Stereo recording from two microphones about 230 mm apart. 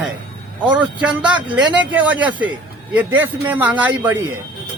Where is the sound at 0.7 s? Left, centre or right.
Centre.